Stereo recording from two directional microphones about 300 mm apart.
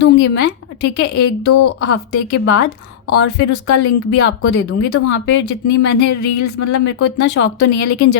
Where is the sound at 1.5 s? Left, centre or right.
Left.